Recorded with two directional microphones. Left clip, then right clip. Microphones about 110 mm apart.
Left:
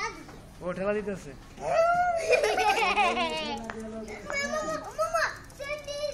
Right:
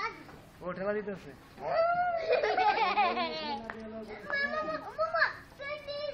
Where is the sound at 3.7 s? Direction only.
Centre (ahead or behind).